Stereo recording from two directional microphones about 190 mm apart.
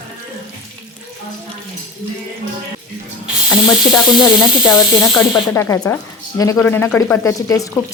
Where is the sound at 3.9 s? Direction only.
20° left (ahead or behind).